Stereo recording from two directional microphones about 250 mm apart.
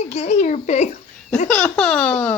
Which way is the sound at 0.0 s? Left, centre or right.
Left.